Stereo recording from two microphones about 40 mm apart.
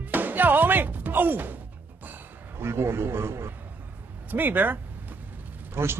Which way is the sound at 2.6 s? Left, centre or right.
Right.